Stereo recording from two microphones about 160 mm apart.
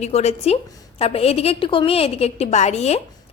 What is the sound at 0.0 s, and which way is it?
A woman's voice, 45° left (ahead or behind).